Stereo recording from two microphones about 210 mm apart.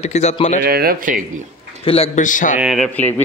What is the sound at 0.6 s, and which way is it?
Speech, 45° right (ahead or behind).